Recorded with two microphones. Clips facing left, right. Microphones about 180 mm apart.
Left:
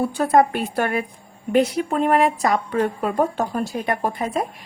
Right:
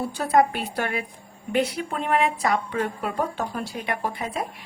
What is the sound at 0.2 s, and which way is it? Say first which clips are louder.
A woman's voice: left 3 dB; 50° left (ahead or behind).